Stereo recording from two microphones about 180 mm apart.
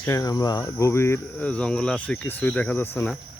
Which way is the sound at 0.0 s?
20° left (ahead or behind).